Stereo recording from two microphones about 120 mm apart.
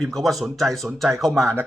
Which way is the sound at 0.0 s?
Centre (ahead or behind).